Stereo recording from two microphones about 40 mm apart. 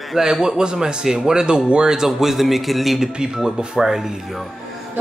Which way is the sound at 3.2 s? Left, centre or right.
Centre.